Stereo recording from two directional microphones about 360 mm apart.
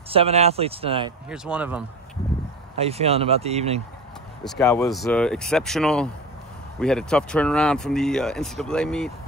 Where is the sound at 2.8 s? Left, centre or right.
Centre.